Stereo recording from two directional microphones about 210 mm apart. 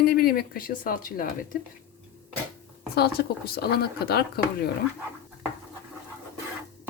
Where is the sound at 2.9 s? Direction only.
50° left (ahead or behind).